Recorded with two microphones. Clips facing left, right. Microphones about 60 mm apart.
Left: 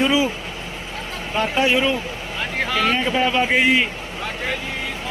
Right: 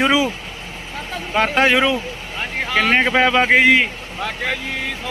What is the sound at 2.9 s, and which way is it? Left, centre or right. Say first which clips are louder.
Speech: right 4 dB; right.